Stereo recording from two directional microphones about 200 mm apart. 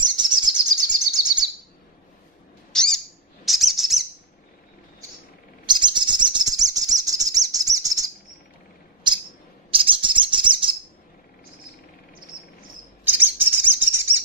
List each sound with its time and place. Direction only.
0.0 s bird vocalization: 20° right (ahead or behind)
0.9 s chirp: 20° right (ahead or behind)
2.7 s owl: centre (ahead or behind)
3.4 s bird: centre (ahead or behind)
5.7 s bird: 20° right (ahead or behind)
13.0 s bird: 10° right (ahead or behind)